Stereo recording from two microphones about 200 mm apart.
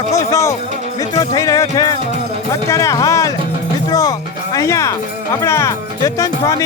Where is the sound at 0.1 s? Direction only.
15° left (ahead or behind).